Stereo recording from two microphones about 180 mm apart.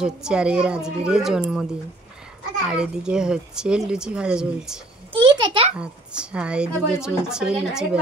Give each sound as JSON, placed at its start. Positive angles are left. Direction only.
{"t": 0.0, "sound": "speech", "side_deg": -5}
{"t": 2.7, "sound": "speech", "side_deg": -5}
{"t": 5.1, "sound": "a sound", "side_deg": -25}
{"t": 5.8, "sound": "speech", "side_deg": -5}